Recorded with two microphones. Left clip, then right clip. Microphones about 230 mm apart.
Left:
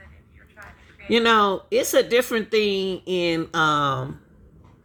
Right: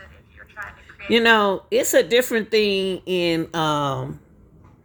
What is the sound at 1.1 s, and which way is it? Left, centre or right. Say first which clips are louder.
Speech: right 2 dB; centre.